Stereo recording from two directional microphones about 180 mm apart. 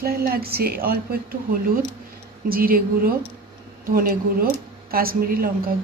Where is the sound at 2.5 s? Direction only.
55° right (ahead or behind).